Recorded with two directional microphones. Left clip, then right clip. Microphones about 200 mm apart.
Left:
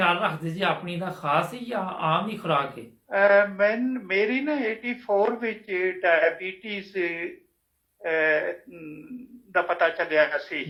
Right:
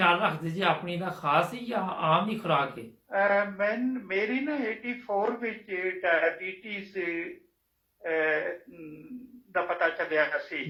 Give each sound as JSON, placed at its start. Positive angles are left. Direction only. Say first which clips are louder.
{"t": 0.0, "sound": "speech", "louder": "left 1 dB", "side_deg": 15}
{"t": 3.1, "sound": "speech", "louder": "left 6 dB", "side_deg": 45}
{"t": 9.5, "sound": "speech", "louder": "left 5 dB", "side_deg": 45}